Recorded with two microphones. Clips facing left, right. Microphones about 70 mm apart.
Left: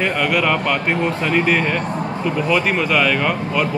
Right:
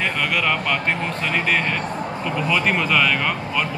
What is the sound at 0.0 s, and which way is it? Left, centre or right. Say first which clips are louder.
Speech: left 4 dB; centre.